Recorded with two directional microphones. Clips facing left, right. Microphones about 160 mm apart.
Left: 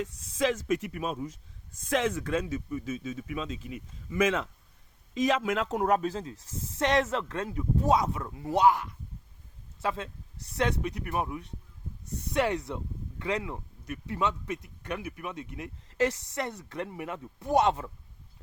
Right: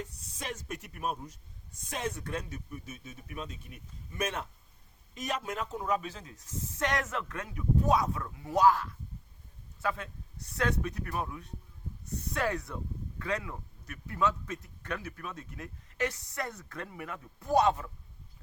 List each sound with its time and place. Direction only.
0.0 s speech: 90° left; by 6.0 s 70° left (ahead or behind)
6.0 s speech: 35° left (ahead or behind)